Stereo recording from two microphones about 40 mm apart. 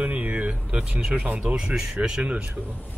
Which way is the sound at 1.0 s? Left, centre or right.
Right.